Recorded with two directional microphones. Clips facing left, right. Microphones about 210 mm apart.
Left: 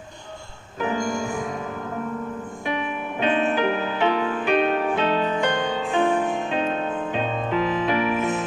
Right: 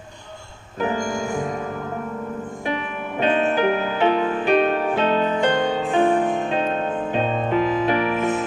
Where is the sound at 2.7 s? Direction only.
45° right (ahead or behind).